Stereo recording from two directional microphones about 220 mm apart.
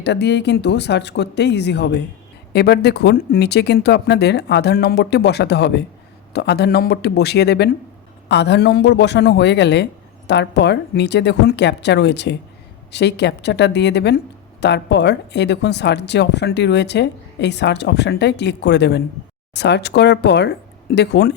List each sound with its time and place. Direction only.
0.0 s speech: 50° left (ahead or behind)